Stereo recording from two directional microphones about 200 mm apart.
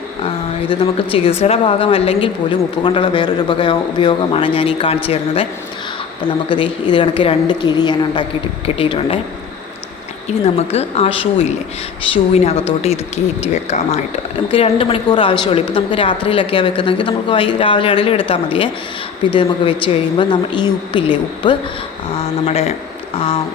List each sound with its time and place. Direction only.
0.7 s a woman's voice: 25° left (ahead or behind)
6.5 s a woman's voice: 25° left (ahead or behind)
10.2 s a woman's voice: 30° left (ahead or behind)